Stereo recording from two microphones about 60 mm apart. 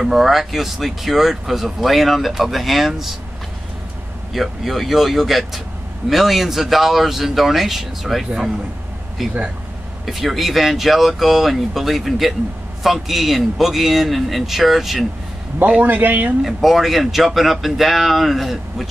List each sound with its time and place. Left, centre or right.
0.0 s speech: centre
4.3 s speech: centre
15.8 s a man's voice: right
16.4 s speech: centre